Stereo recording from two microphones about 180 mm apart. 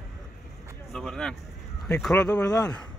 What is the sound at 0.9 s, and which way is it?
Speech, centre (ahead or behind).